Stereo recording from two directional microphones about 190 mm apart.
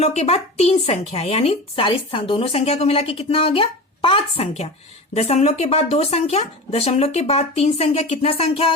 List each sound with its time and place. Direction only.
0.0 s speech: 35° left (ahead or behind)